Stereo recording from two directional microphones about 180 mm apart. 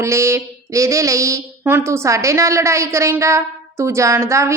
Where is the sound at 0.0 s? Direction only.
15° right (ahead or behind).